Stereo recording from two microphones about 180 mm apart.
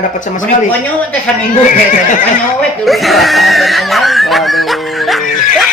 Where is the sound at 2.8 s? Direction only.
Centre (ahead or behind).